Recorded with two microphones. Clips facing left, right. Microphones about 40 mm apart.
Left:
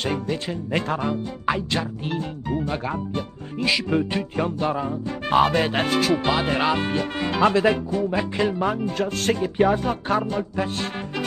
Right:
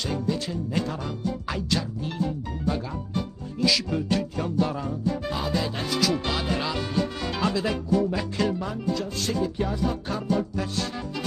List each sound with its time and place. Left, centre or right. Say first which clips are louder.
0.0 s speech: left 2 dB; left
6.1 s music: left 6 dB; left
6.4 s speech: left 6 dB; left
8.1 s music: left 3 dB; left
8.5 s speech: left 5 dB; left